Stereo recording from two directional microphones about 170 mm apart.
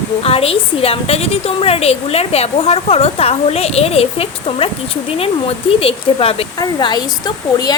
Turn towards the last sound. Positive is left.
turn(degrees=25)  # may be behind; listen again after turning